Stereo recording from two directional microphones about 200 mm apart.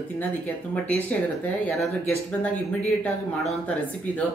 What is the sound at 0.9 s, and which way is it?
Speech, 10° left (ahead or behind).